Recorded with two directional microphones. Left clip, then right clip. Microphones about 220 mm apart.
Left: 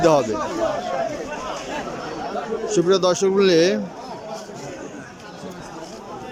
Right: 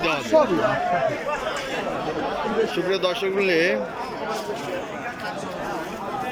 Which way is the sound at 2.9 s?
25° left (ahead or behind).